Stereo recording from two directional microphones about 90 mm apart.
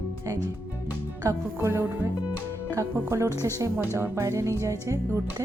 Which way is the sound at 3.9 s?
30° right (ahead or behind).